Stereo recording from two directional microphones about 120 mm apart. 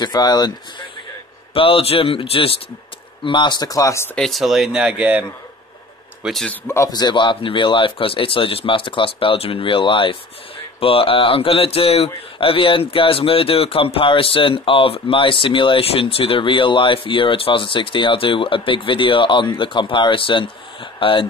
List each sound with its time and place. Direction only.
0.0 s speech: 35° left (ahead or behind)
1.5 s speech: 50° left (ahead or behind); by 4.1 s 25° left (ahead or behind)
4.1 s speech: 5° left (ahead or behind)
6.2 s speech: centre (ahead or behind)
6.5 s speech: 20° left (ahead or behind)
6.9 s speech: 35° left (ahead or behind)